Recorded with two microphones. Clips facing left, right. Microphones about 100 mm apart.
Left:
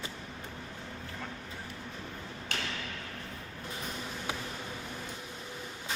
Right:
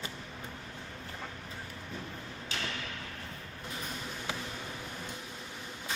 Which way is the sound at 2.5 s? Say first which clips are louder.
Left 1 dB; 60° left (ahead or behind).